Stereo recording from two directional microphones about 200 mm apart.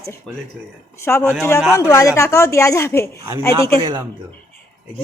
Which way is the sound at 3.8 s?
20° right (ahead or behind).